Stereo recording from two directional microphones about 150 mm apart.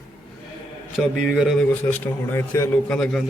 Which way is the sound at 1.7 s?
15° left (ahead or behind).